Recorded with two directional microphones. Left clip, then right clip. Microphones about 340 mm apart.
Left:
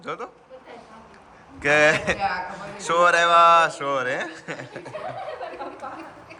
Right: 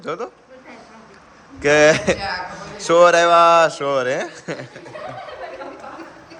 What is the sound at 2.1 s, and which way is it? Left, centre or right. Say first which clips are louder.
Speech: even; left.